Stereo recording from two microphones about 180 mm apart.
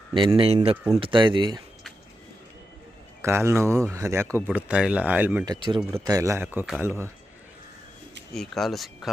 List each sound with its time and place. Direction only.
0.1 s speech: 30° right (ahead or behind)
3.2 s speech: 15° right (ahead or behind)
5.5 s speech: 25° right (ahead or behind)
8.3 s speech: centre (ahead or behind)